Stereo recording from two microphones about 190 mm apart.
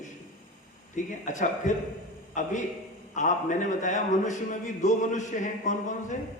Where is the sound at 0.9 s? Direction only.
40° left (ahead or behind).